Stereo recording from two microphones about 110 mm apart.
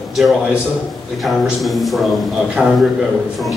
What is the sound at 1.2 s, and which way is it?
A man's voice, centre (ahead or behind).